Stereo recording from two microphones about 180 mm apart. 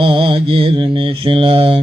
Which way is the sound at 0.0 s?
30° right (ahead or behind).